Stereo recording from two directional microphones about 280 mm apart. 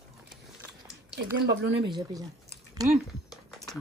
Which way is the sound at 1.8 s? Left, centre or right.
Centre.